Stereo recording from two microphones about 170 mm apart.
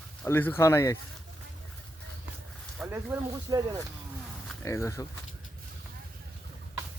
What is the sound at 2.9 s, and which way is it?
Speech, 15° right (ahead or behind).